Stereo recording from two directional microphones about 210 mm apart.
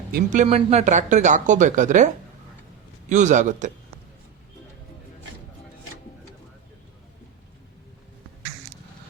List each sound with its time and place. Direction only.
0.1 s speech: 35° right (ahead or behind)
3.1 s speech: 35° right (ahead or behind)